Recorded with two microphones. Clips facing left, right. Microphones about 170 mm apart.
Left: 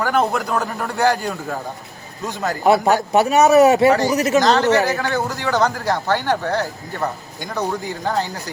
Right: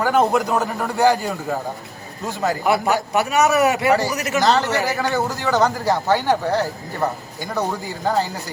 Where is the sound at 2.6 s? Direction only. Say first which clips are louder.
Left 6 dB; 25° left (ahead or behind).